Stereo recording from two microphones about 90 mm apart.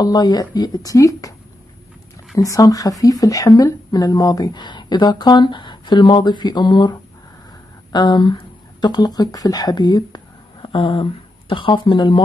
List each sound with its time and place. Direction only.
0.0 s speech: 50° left (ahead or behind)
2.3 s speech: 40° left (ahead or behind)
10.7 s speech: 90° left; by 12.2 s 60° left (ahead or behind)